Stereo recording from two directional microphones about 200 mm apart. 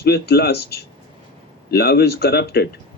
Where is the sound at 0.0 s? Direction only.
50° left (ahead or behind).